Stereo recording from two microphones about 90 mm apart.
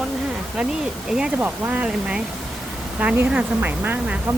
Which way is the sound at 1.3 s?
20° right (ahead or behind).